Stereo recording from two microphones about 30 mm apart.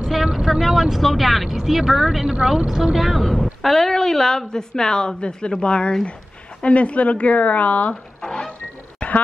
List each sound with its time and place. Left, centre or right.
0.2 s vehicle: centre
1.0 s speech: centre
2.0 s speech: centre
3.0 s speech: centre
3.6 s a woman's voice: centre
5.6 s a woman's voice: left
7.9 s a sound: left
9.0 s a sound: left